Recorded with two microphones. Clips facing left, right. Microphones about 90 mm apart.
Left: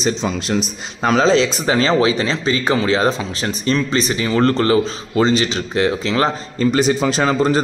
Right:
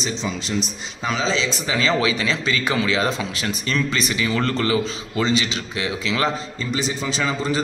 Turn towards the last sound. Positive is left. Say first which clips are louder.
# left 7 dB
turn(degrees=50)  # may be behind; listen again after turning